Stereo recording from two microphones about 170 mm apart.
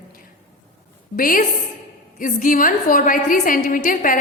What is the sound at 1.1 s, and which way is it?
A woman's voice, 55° left (ahead or behind).